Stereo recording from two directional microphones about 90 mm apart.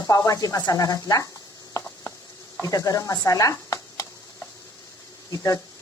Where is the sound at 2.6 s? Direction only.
40° left (ahead or behind).